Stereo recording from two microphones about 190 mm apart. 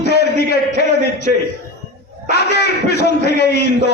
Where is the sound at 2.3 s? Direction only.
60° left (ahead or behind).